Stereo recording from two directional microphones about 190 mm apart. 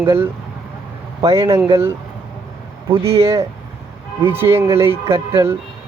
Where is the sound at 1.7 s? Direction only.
15° right (ahead or behind).